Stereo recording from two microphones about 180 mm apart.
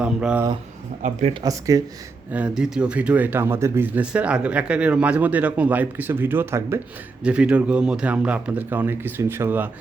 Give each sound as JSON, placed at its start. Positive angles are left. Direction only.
{"t": 0.0, "sound": "speech", "side_deg": -5}
{"t": 1.0, "sound": "speech", "side_deg": -35}
{"t": 1.4, "sound": "speech", "side_deg": -20}
{"t": 2.3, "sound": "speech", "side_deg": -5}